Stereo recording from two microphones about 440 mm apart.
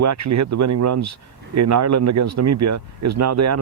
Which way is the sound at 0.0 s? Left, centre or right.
Right.